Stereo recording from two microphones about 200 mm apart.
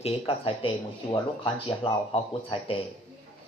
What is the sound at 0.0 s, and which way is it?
Speech, 25° left (ahead or behind).